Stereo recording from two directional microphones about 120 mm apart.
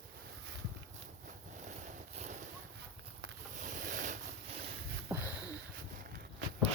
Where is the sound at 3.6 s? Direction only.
90° right.